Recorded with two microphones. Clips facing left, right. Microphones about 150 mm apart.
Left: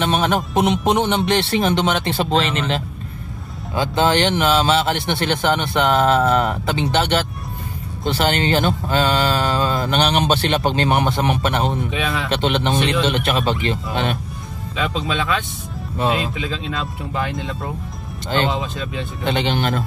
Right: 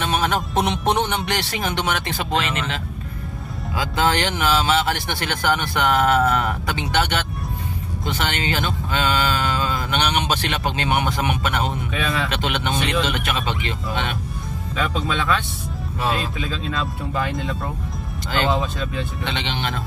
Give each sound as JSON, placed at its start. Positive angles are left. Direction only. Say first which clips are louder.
{"t": 0.0, "sound": "speech", "louder": "left 3 dB", "side_deg": 25}
{"t": 13.5, "sound": "speech", "louder": "left 5 dB", "side_deg": 40}
{"t": 16.0, "sound": "speech", "louder": "left 4 dB", "side_deg": 25}
{"t": 19.2, "sound": "speech", "louder": "left 10 dB", "side_deg": 45}